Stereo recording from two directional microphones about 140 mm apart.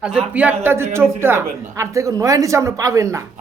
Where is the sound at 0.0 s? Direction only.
5° right (ahead or behind).